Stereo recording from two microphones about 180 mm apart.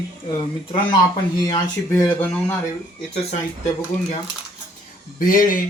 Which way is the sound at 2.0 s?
10° left (ahead or behind).